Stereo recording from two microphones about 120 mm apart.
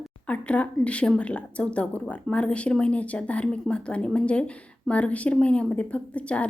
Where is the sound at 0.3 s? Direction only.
10° left (ahead or behind).